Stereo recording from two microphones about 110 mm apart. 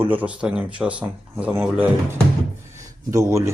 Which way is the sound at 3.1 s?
30° right (ahead or behind).